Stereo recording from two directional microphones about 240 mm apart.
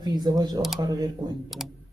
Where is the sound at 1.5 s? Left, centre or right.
Centre.